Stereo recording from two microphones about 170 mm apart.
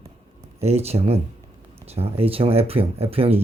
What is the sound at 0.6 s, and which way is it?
Speech, 40° right (ahead or behind).